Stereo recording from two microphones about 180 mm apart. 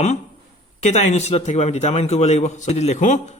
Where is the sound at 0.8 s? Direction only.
40° left (ahead or behind).